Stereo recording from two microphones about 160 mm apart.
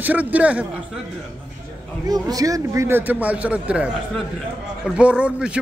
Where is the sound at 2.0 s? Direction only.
25° right (ahead or behind).